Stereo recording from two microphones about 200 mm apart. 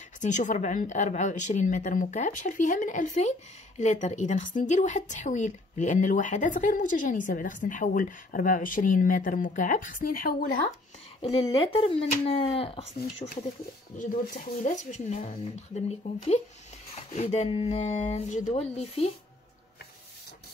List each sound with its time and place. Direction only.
0.2 s speech: 40° left (ahead or behind)
11.4 s speech: 25° left (ahead or behind)
13.9 s speech: 40° left (ahead or behind)